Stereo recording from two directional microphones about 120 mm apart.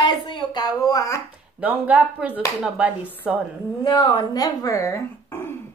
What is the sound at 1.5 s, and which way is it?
A woman's voice, 15° right (ahead or behind).